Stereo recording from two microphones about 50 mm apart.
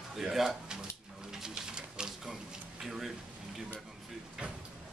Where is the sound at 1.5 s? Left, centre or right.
Centre.